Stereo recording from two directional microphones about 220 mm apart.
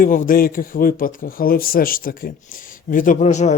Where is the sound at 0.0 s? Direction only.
40° left (ahead or behind).